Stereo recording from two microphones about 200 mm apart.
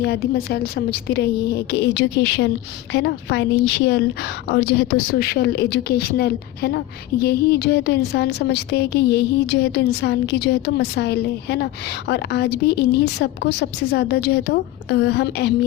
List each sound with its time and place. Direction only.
0.0 s a woman's voice: 50° left (ahead or behind)